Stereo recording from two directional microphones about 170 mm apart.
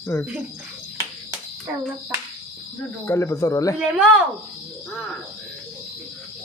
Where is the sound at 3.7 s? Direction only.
5° right (ahead or behind).